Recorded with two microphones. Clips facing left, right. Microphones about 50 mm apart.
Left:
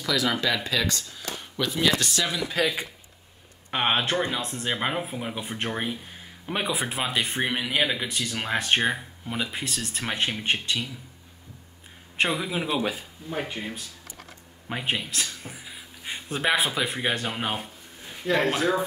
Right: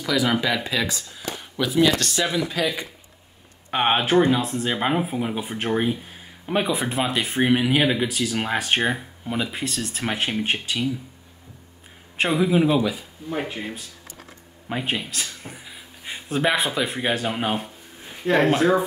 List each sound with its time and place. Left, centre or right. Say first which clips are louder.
0.0 s speech: right 3 dB; centre
4.0 s speech: right 8 dB; centre
12.2 s speech: right 7 dB; centre
18.4 s speech: right 7 dB; centre